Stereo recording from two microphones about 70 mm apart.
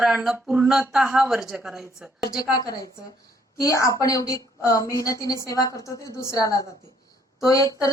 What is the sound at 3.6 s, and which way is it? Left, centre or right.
A woman's voice, left.